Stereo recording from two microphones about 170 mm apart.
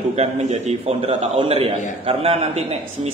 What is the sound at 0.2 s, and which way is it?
A man's voice, 40° right (ahead or behind).